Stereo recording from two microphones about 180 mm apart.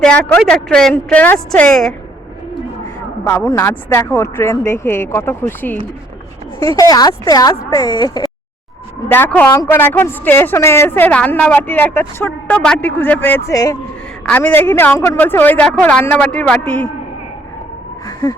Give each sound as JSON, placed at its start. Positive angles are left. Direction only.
{"t": 0.0, "sound": "a woman's voice", "side_deg": 5}
{"t": 3.2, "sound": "a woman's voice", "side_deg": 15}
{"t": 6.7, "sound": "a woman's voice", "side_deg": 20}
{"t": 9.0, "sound": "a woman's voice", "side_deg": 10}